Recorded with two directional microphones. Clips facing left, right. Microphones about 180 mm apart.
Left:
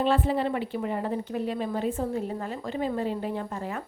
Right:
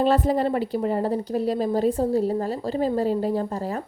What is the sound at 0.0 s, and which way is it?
A woman's voice, 40° right (ahead or behind).